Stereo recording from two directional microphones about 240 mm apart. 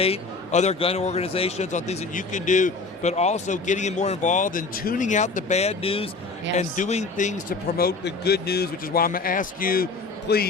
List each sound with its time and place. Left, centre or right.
0.0 s a man's voice: left